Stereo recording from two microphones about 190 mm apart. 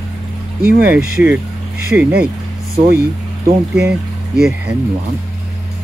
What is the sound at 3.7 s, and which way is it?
Speech, 5° right (ahead or behind).